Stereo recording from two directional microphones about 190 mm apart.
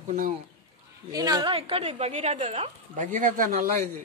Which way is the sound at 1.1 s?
20° right (ahead or behind).